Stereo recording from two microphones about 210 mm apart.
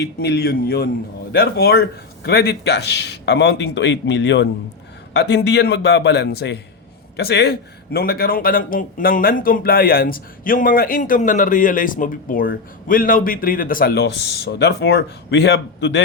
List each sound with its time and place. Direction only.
0.2 s a man's voice: 50° left (ahead or behind)